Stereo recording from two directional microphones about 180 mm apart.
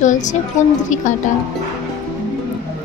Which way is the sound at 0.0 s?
45° left (ahead or behind).